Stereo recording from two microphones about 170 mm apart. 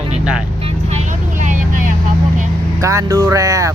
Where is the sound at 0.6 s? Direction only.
45° right (ahead or behind).